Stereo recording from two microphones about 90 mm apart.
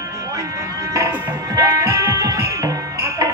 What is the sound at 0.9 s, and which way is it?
Music, 35° right (ahead or behind).